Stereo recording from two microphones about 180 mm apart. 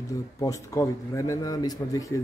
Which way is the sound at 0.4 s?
20° left (ahead or behind).